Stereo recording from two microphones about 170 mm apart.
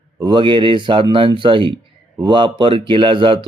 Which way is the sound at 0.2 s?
25° right (ahead or behind).